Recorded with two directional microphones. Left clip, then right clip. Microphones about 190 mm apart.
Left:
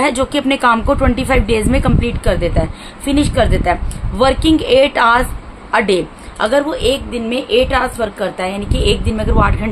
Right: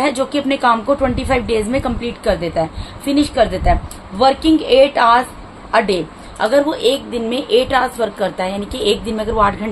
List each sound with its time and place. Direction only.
0.0 s a woman's voice: 25° left (ahead or behind)